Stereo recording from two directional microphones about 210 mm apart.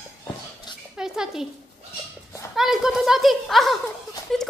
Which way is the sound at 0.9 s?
5° right (ahead or behind).